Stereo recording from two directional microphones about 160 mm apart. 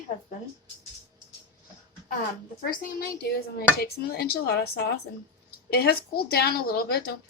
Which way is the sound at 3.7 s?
75° left (ahead or behind).